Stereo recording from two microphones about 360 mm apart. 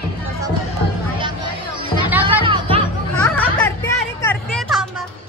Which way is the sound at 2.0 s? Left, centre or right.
Centre.